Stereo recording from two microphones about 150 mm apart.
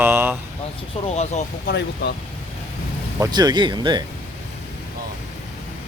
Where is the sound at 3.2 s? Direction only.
25° right (ahead or behind).